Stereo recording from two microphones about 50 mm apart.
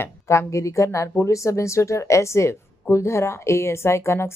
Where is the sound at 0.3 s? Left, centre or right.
Left.